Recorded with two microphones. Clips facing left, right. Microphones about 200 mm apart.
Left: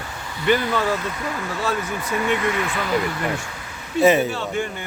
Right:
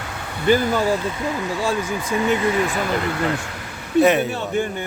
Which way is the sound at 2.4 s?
35° right (ahead or behind).